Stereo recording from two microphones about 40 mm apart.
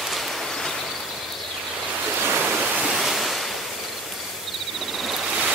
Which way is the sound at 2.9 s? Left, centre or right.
Centre.